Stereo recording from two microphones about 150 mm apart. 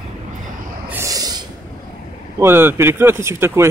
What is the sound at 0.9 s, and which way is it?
Snort, 20° right (ahead or behind).